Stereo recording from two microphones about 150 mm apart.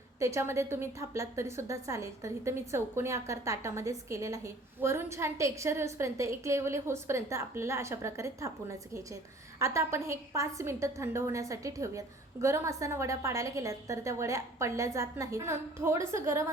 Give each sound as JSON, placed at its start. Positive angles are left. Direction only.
{"t": 0.2, "sound": "a woman's voice", "side_deg": -20}